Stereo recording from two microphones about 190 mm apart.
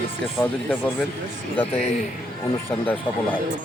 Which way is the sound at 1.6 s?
35° left (ahead or behind).